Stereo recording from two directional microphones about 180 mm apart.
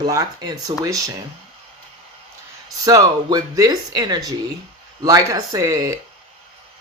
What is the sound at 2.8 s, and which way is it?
Speech, 20° right (ahead or behind).